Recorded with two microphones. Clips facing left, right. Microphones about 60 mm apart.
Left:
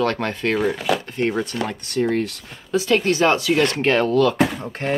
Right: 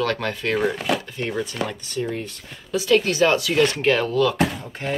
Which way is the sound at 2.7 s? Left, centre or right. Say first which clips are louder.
Left 1 dB; left.